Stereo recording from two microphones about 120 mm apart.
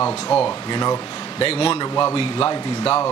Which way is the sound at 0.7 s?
35° left (ahead or behind).